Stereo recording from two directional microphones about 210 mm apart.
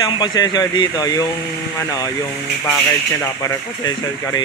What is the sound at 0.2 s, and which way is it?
Speech, 20° left (ahead or behind).